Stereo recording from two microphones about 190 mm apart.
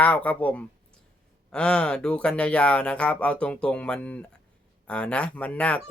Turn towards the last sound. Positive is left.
turn(degrees=5)  # may be behind; listen again after turning